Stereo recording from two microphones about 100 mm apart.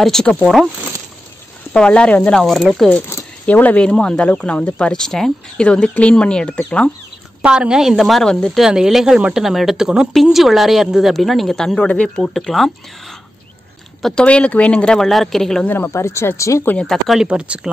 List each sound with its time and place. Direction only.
0.0 s a woman's voice: 5° left (ahead or behind)
1.7 s speech: 10° left (ahead or behind)
3.4 s speech: 15° left (ahead or behind)
7.4 s a woman's voice: 10° right (ahead or behind)
14.0 s speech: 10° left (ahead or behind)
15.6 s speech: 20° left (ahead or behind)
16.7 s a woman's voice: centre (ahead or behind)
17.3 s speech: 10° right (ahead or behind)